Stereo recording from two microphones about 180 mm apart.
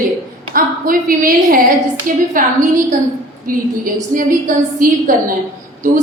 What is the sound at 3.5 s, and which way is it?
A woman's voice, 50° right (ahead or behind).